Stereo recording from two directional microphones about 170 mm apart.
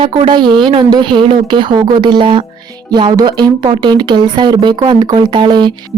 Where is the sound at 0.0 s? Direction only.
30° right (ahead or behind).